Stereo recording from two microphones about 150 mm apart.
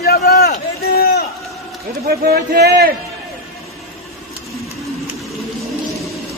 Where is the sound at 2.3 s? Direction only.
90° right.